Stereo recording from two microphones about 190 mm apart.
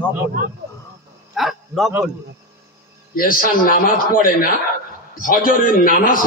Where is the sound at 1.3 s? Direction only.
Centre (ahead or behind).